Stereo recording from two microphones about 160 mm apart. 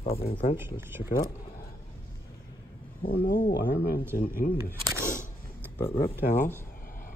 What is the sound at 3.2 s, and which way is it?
Speech, 60° left (ahead or behind).